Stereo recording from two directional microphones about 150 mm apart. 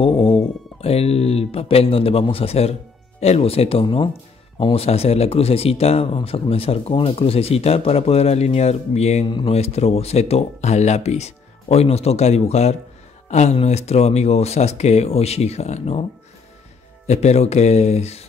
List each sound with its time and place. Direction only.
0.0 s speech: 40° left (ahead or behind)
17.1 s speech: 50° left (ahead or behind)